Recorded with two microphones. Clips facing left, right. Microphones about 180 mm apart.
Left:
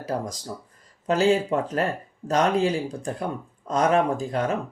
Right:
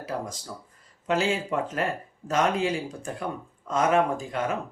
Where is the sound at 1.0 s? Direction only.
35° left (ahead or behind).